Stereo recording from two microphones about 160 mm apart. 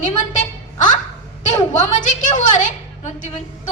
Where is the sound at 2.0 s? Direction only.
50° left (ahead or behind).